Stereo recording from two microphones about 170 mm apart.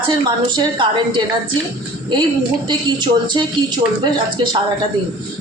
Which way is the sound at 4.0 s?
25° right (ahead or behind).